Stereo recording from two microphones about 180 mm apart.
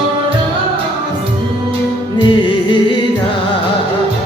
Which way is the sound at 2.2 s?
25° left (ahead or behind).